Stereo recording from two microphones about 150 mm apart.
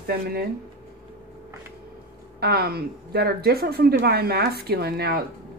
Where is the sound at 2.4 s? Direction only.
90° right.